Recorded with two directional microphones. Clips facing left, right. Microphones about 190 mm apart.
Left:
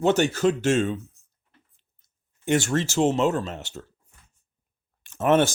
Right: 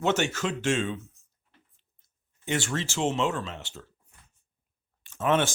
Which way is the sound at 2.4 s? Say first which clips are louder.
Left 7 dB; 45° left (ahead or behind).